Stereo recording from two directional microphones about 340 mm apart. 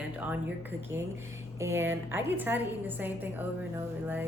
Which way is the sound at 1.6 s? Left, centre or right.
Centre.